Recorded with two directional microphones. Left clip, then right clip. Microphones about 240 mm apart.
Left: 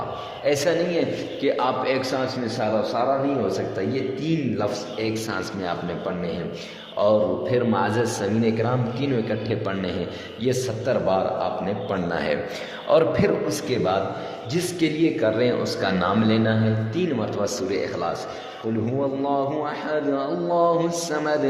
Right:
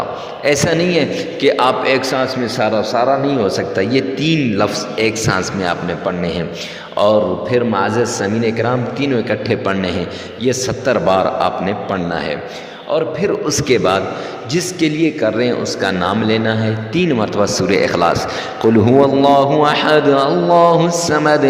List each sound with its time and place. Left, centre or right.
0.4 s a man's voice: right
6.9 s a man's voice: right
12.9 s a man's voice: centre
13.5 s a man's voice: right